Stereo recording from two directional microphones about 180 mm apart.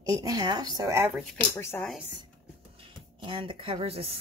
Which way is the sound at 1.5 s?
15° left (ahead or behind).